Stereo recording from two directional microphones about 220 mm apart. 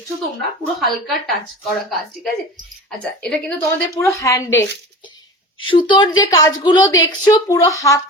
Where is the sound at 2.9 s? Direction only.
5° left (ahead or behind).